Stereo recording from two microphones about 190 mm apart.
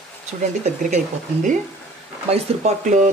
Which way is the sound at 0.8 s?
40° right (ahead or behind).